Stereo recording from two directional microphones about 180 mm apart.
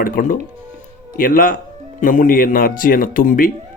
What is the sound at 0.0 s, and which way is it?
Speech, 50° left (ahead or behind).